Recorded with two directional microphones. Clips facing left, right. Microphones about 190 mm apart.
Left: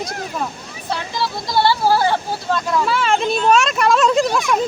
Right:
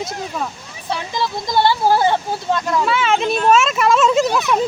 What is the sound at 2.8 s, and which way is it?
Speech, centre (ahead or behind).